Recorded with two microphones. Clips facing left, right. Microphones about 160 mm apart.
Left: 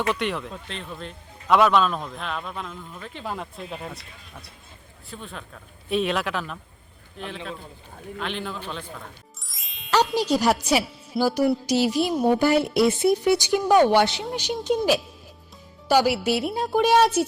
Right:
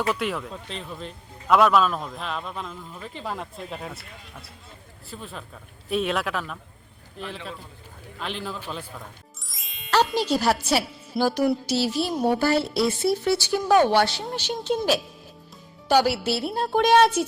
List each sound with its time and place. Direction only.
0.1 s a man's voice: centre (ahead or behind)
5.1 s a man's voice: centre (ahead or behind)
9.5 s music: centre (ahead or behind)
10.2 s speech: 10° left (ahead or behind)